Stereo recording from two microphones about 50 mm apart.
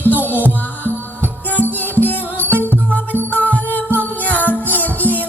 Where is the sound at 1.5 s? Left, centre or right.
Left.